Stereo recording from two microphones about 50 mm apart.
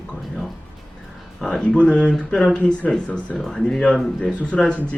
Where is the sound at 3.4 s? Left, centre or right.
Centre.